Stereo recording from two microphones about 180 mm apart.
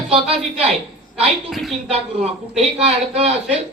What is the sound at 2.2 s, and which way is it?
A man's voice, 35° right (ahead or behind).